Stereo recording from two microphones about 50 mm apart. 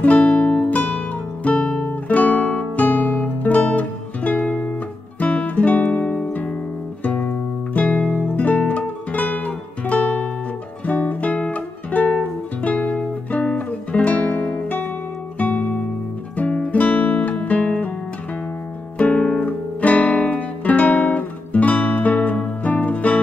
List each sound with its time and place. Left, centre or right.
0.0 s music: left
5.2 s guitar: left
7.0 s music: left
16.3 s guitar: left
18.9 s music: left
19.4 s guitar: left